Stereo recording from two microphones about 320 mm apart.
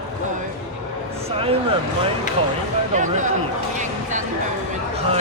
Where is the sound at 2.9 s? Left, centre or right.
Right.